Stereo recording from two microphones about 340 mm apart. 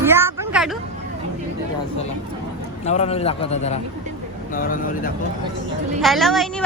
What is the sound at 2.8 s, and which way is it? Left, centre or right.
A man's voice, centre.